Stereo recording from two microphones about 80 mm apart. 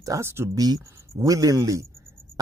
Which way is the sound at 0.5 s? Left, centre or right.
Right.